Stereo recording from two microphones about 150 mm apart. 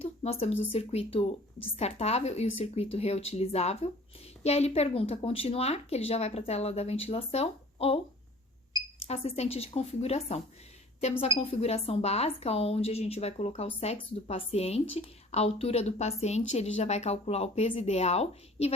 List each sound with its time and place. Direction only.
0.0 s a sound: 40° left (ahead or behind)
0.7 s speech: 45° left (ahead or behind)
9.0 s speech: 45° left (ahead or behind)